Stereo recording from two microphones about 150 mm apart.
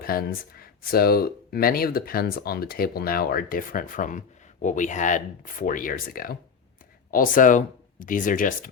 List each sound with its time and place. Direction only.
0.0 s speech: 80° left